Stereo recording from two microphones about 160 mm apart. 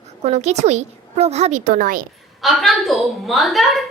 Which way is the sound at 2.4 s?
Centre (ahead or behind).